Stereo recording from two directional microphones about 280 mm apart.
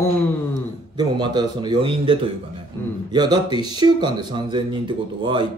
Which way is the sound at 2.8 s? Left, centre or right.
Centre.